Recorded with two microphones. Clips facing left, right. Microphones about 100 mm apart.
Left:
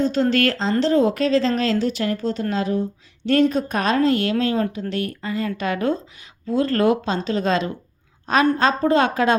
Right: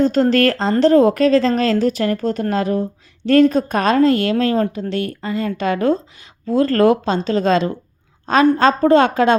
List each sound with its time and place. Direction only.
0.0 s a woman's voice: 50° right (ahead or behind)
3.5 s speech: 40° right (ahead or behind)